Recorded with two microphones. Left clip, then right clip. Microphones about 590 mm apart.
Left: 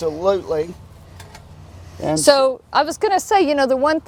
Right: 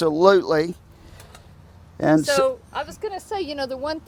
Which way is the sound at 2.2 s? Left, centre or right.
Left.